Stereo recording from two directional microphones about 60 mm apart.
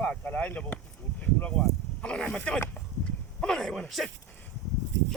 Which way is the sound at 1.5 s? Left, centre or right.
Centre.